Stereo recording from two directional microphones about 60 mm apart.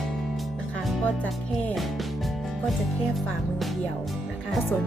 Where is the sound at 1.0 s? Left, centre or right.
Left.